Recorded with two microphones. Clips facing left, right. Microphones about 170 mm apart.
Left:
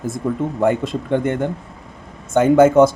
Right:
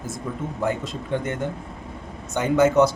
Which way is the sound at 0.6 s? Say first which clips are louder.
Left 8 dB; 60° left (ahead or behind).